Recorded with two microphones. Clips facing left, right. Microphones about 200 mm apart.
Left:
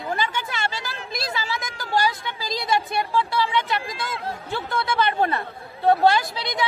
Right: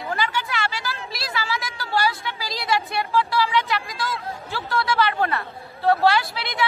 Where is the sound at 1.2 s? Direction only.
20° left (ahead or behind).